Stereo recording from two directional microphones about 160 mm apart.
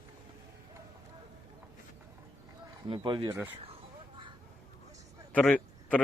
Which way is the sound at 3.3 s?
15° right (ahead or behind).